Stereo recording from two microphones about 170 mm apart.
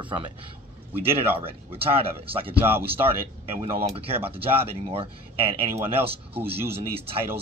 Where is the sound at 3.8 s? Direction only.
35° right (ahead or behind).